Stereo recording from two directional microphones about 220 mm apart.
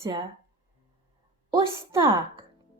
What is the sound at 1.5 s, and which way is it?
Speech, 10° right (ahead or behind).